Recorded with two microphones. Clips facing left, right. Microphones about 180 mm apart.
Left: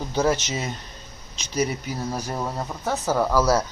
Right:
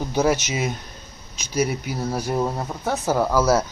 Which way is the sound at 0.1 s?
10° right (ahead or behind).